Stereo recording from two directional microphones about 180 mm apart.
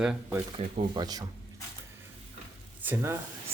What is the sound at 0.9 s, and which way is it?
Speech, 25° right (ahead or behind).